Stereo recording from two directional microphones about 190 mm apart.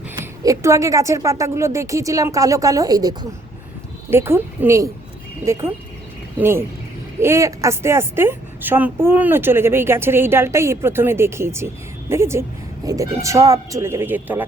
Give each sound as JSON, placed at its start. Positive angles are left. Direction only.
{"t": 0.4, "sound": "a woman's voice", "side_deg": -15}